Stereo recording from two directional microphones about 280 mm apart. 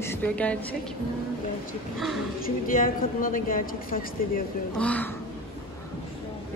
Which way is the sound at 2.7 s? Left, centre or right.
Left.